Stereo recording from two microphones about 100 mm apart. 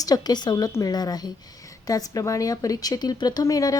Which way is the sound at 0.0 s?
40° left (ahead or behind).